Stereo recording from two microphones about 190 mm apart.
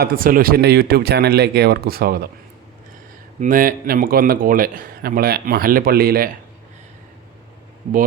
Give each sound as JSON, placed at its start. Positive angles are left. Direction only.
{"t": 0.0, "sound": "speech", "side_deg": -50}
{"t": 3.4, "sound": "a man's voice", "side_deg": -45}